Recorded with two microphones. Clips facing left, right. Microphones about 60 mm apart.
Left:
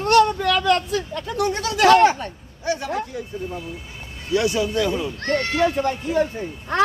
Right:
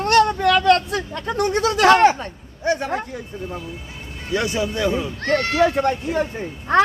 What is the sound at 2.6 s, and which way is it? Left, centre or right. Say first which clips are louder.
Speech: right 3 dB; right.